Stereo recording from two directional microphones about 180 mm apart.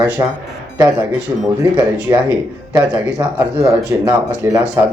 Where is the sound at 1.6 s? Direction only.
15° right (ahead or behind).